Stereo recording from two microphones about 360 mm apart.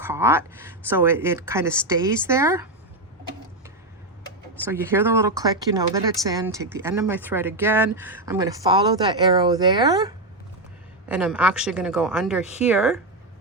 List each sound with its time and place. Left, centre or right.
0.0 s speech: centre
4.5 s speech: centre
11.1 s speech: centre